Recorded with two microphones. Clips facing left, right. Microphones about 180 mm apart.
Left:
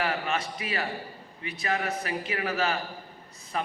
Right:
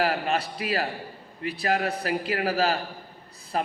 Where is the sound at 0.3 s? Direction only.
35° right (ahead or behind).